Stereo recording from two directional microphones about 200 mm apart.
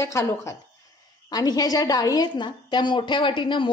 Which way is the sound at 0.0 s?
15° left (ahead or behind).